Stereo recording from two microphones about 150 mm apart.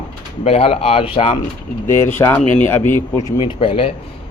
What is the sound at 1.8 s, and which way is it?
Speech, 15° left (ahead or behind).